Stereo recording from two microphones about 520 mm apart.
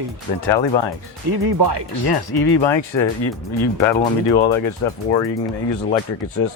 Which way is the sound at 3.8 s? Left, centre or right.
Centre.